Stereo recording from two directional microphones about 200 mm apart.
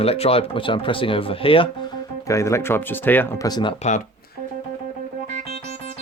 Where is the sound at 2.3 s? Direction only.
15° left (ahead or behind).